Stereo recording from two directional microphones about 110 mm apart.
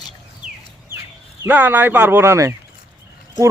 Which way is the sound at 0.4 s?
90° right.